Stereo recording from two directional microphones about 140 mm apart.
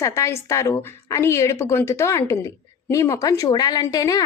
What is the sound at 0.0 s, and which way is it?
A woman's voice, 20° left (ahead or behind).